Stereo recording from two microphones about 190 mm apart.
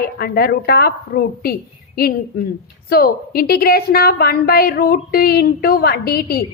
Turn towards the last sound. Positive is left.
turn(degrees=55)  # may be behind; listen again after turning